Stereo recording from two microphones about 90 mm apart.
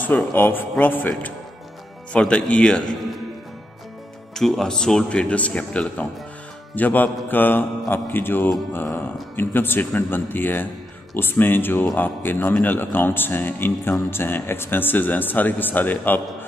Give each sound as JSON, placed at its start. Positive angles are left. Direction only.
{"t": 0.0, "sound": "speech", "side_deg": 20}
{"t": 4.4, "sound": "speech", "side_deg": 5}